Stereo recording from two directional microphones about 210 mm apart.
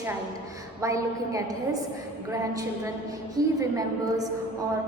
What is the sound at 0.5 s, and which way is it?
A woman's voice, 15° right (ahead or behind).